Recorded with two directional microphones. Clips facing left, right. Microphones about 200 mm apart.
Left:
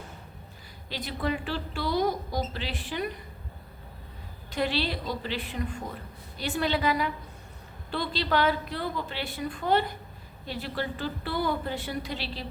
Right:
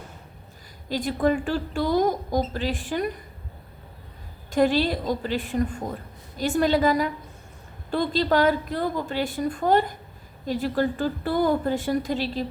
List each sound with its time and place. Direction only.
0.9 s a woman's voice: 45° right (ahead or behind)
4.5 s a woman's voice: 45° right (ahead or behind)